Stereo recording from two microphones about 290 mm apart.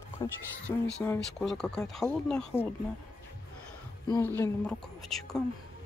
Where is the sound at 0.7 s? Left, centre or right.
Centre.